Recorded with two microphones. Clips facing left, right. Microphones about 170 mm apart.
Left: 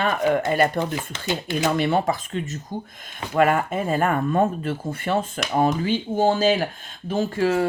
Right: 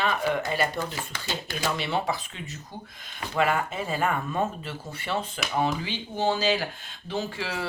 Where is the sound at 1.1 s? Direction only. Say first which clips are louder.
Left 8 dB; 20° left (ahead or behind).